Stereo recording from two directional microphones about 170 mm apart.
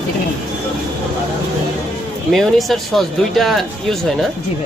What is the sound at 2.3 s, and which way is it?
Speech, centre (ahead or behind).